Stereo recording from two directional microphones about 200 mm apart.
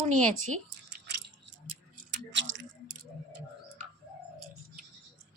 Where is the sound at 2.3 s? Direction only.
75° right (ahead or behind).